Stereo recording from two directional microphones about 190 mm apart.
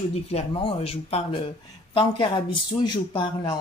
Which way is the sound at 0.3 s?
30° left (ahead or behind).